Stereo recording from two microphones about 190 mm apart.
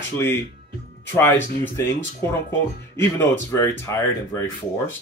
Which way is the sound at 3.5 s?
15° left (ahead or behind).